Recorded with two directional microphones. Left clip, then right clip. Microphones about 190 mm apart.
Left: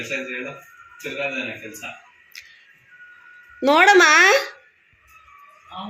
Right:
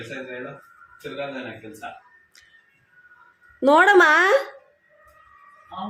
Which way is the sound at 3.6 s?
15° right (ahead or behind).